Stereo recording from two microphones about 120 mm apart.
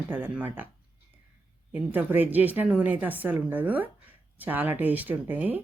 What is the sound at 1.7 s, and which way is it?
A woman's voice, 15° right (ahead or behind).